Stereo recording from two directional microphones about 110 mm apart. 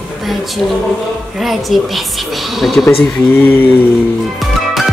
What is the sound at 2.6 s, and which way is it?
Speech, centre (ahead or behind).